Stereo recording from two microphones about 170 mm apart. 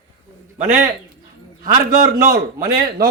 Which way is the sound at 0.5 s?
45° right (ahead or behind).